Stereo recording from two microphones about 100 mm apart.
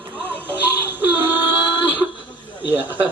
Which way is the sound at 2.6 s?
15° right (ahead or behind).